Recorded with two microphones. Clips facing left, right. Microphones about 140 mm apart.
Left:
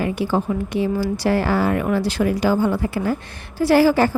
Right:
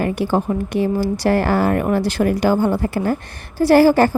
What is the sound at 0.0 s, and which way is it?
A woman's voice, 45° right (ahead or behind).